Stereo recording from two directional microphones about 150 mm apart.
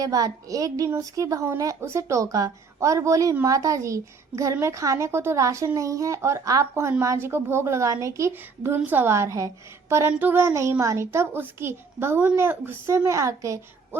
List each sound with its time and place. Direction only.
0.0 s a woman's voice: 25° right (ahead or behind)